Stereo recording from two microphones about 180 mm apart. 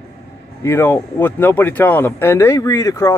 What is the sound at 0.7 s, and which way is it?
Speech, 15° left (ahead or behind).